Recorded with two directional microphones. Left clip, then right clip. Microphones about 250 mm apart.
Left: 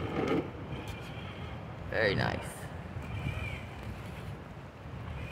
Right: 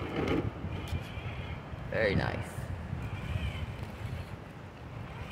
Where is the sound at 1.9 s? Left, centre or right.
Centre.